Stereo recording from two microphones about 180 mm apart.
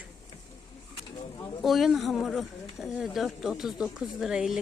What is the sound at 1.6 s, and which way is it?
Speech, centre (ahead or behind).